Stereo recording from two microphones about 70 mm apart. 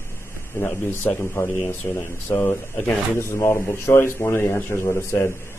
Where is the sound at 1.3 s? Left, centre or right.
Left.